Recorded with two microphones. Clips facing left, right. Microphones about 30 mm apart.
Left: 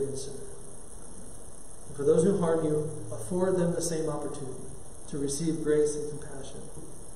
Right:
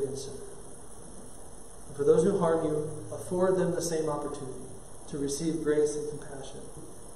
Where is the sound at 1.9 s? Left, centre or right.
Centre.